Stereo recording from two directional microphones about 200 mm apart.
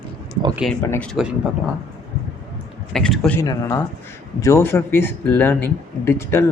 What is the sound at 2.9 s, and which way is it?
Speech, 5° left (ahead or behind).